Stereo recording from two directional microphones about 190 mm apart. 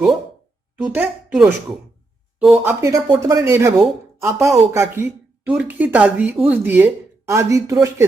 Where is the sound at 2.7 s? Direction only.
15° right (ahead or behind).